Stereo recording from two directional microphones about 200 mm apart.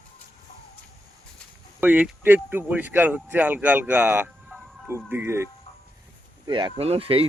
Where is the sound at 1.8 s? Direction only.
10° right (ahead or behind).